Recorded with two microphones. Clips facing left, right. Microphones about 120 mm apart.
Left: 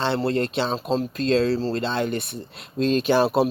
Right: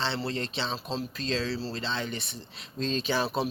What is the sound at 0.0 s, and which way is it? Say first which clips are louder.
A man's voice: left 9 dB; 50° left (ahead or behind).